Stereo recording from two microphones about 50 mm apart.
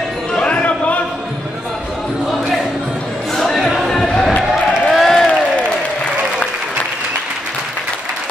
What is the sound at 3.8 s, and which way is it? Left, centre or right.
Basketball bounce, centre.